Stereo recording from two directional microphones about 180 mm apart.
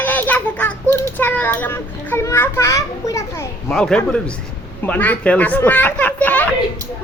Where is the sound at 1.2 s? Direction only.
10° left (ahead or behind).